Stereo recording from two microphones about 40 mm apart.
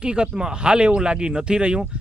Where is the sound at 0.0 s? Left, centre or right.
Right.